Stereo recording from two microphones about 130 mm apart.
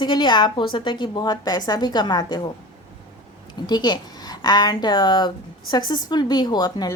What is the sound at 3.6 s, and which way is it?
Speech, 35° left (ahead or behind).